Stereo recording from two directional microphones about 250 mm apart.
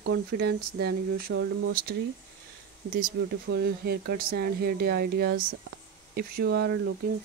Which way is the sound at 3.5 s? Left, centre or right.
Right.